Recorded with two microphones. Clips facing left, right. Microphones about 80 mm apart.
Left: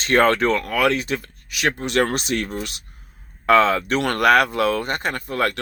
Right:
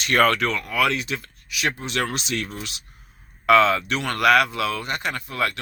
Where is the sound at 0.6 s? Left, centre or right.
Left.